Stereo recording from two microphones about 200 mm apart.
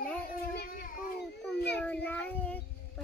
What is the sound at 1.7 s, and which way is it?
Speech, 5° left (ahead or behind).